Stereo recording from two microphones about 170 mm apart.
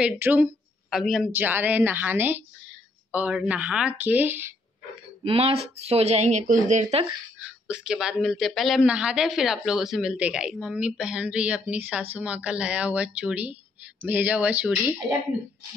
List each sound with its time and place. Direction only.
0.0 s a woman's voice: 10° right (ahead or behind)
5.2 s speech: 35° right (ahead or behind)
7.3 s speech: 5° right (ahead or behind)